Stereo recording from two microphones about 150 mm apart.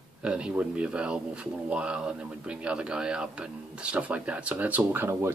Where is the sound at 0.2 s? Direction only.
5° right (ahead or behind).